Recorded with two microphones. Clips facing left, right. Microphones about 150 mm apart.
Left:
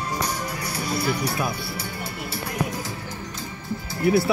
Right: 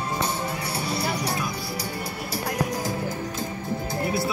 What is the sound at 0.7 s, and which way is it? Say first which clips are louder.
Music: left 4 dB; 30° right (ahead or behind).